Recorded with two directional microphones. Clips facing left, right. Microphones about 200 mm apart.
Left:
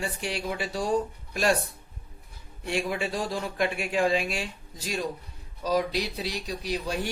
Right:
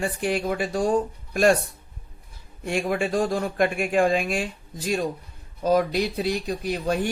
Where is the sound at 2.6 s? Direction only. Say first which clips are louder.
Right 4 dB; 50° right (ahead or behind).